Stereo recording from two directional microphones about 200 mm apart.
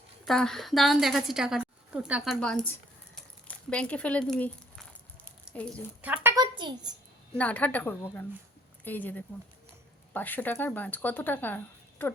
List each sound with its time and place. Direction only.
0.3 s a woman's voice: centre (ahead or behind)
5.5 s a woman's voice: 5° left (ahead or behind)
6.0 s a woman's voice: 10° right (ahead or behind)
6.3 s speech: 20° right (ahead or behind)
7.3 s speech: 5° left (ahead or behind)